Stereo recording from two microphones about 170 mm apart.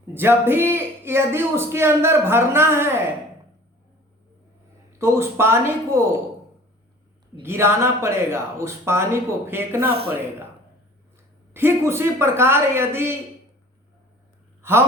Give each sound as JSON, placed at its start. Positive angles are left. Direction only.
{"t": 0.1, "sound": "a man's voice", "side_deg": -15}
{"t": 4.9, "sound": "a man's voice", "side_deg": -15}
{"t": 7.4, "sound": "a man's voice", "side_deg": -15}
{"t": 11.5, "sound": "a man's voice", "side_deg": -15}
{"t": 14.6, "sound": "a sound", "side_deg": -15}